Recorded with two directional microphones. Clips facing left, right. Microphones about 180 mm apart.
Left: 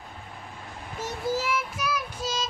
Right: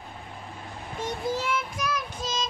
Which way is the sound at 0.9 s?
5° left (ahead or behind).